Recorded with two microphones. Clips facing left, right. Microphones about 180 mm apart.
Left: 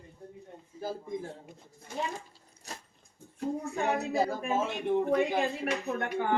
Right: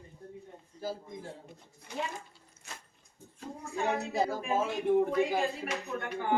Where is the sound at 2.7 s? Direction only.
40° left (ahead or behind).